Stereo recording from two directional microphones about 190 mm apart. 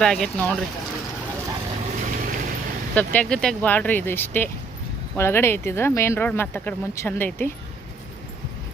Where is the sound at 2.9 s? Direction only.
10° left (ahead or behind).